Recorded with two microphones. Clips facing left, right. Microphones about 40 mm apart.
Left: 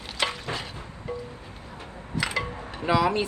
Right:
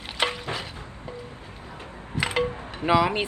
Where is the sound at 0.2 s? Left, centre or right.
Right.